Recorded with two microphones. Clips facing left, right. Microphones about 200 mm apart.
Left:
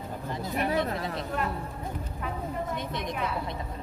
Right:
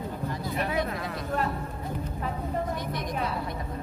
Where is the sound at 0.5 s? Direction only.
40° left (ahead or behind).